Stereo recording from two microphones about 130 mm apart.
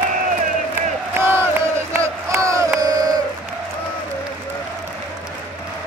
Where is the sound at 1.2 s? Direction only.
20° right (ahead or behind).